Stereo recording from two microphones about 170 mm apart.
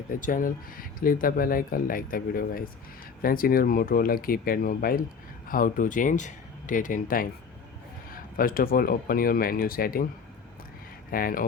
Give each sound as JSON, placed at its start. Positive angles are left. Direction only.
{"t": 0.1, "sound": "speech", "side_deg": 50}
{"t": 11.1, "sound": "speech", "side_deg": 55}